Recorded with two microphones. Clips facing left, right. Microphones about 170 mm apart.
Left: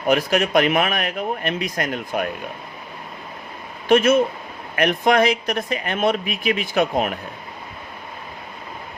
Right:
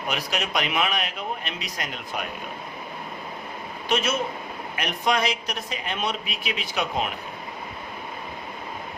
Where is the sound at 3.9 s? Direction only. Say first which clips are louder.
Left 10 dB; 55° left (ahead or behind).